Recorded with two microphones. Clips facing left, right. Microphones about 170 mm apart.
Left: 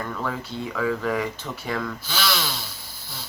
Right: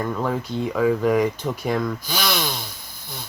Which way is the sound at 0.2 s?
20° right (ahead or behind).